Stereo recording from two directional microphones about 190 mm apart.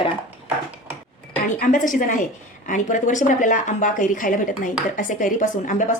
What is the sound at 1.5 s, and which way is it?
Speech, 45° left (ahead or behind).